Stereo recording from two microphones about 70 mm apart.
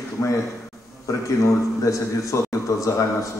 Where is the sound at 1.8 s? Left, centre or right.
Left.